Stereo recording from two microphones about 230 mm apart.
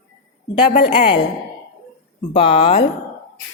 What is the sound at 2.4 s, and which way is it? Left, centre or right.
Speech, left.